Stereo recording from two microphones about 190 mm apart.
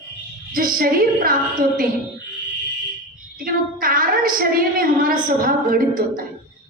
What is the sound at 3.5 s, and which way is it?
A woman's voice, 50° right (ahead or behind).